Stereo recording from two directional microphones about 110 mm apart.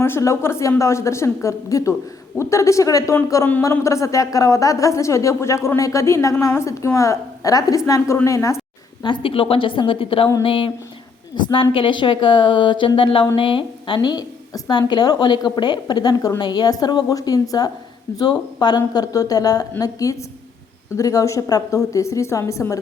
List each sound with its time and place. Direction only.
0.0 s a woman's voice: 25° left (ahead or behind)
9.0 s a woman's voice: 55° left (ahead or behind)
10.4 s a sound: 55° left (ahead or behind)
11.4 s a woman's voice: 50° left (ahead or behind)
13.0 s a sound: 55° left (ahead or behind)
13.3 s a woman's voice: 50° left (ahead or behind); by 22.8 s 30° left (ahead or behind)